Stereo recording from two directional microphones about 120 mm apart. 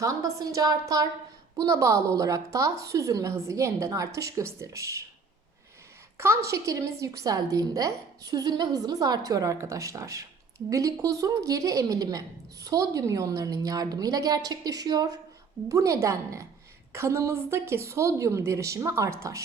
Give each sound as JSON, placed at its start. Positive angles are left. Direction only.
{"t": 0.0, "sound": "a woman's voice", "side_deg": -30}
{"t": 6.1, "sound": "a woman's voice", "side_deg": -20}